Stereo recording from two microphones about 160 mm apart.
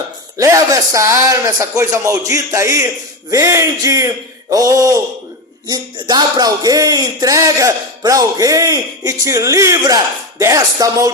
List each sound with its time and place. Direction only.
0.3 s speech: 20° right (ahead or behind)